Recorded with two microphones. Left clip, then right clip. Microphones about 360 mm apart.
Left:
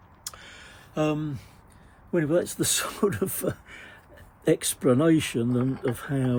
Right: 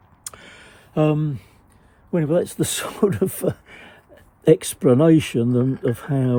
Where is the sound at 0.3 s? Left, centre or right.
Right.